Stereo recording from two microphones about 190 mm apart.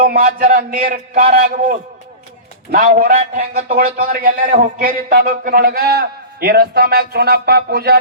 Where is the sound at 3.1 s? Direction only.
35° right (ahead or behind).